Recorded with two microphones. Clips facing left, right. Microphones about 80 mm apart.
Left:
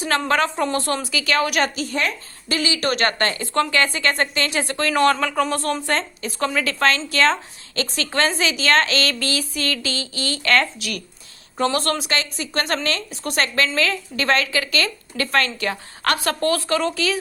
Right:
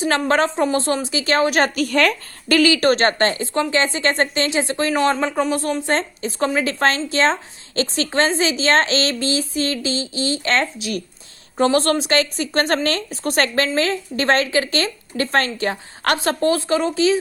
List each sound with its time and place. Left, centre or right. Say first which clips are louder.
0.0 s a woman's voice: right 2 dB; right
1.7 s a woman's voice: right 6 dB; right
2.6 s a woman's voice: right 8 dB; right
2.9 s a woman's voice: right 4 dB; right
3.5 s a woman's voice: right 1 dB; centre